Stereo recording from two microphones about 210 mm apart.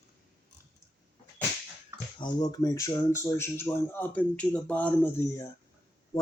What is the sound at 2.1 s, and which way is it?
Speech, 20° left (ahead or behind).